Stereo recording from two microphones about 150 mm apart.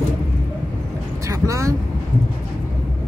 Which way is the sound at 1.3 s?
20° right (ahead or behind).